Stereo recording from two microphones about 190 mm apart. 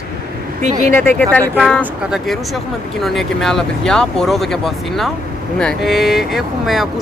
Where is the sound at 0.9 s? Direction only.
10° left (ahead or behind).